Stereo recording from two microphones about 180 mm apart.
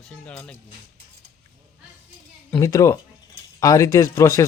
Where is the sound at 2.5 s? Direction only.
15° left (ahead or behind).